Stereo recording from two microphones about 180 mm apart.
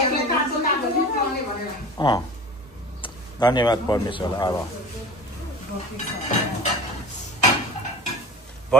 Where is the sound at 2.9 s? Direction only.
25° left (ahead or behind).